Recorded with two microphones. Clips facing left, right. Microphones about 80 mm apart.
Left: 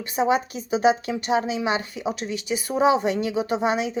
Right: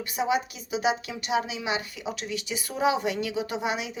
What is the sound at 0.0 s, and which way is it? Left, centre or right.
A woman's voice, left.